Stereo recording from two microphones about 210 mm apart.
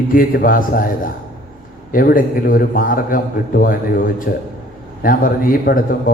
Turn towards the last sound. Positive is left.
turn(degrees=45)  # may be behind; listen again after turning